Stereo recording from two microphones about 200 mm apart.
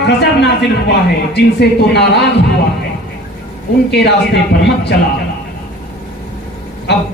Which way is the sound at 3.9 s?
55° left (ahead or behind).